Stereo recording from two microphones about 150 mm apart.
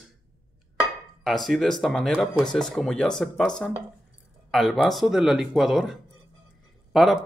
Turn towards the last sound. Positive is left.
turn(degrees=0)  # may be behind; listen again after turning